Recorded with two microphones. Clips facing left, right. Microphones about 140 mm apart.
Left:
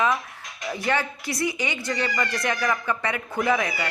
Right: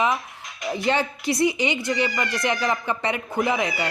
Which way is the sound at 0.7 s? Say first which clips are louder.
Right 3 dB; 25° right (ahead or behind).